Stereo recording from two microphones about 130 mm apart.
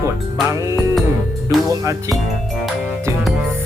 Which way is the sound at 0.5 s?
25° right (ahead or behind).